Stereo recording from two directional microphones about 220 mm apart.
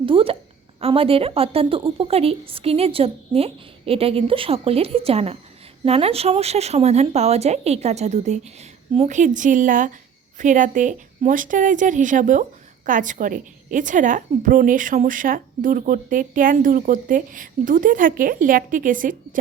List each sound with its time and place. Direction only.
0.0 s a woman's voice: 25° right (ahead or behind)